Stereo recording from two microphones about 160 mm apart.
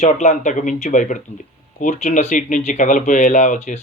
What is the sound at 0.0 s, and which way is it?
Speech, 50° left (ahead or behind).